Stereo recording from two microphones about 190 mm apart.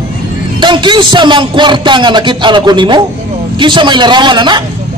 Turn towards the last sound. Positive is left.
turn(degrees=-25)  # may be behind; listen again after turning